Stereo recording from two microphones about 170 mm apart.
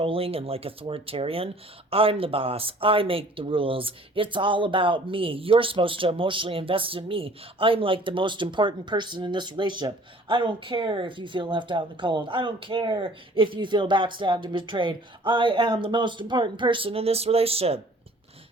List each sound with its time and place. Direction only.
0.0 s speech: 35° right (ahead or behind)